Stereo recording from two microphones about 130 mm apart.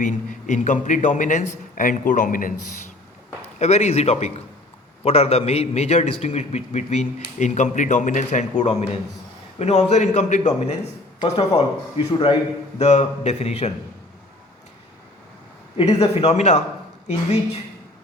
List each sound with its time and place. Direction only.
0.0 s a man's voice: 75° left (ahead or behind)
1.7 s a man's voice: 90° left
3.6 s a man's voice: 55° left (ahead or behind)
15.8 s speech: 55° left (ahead or behind)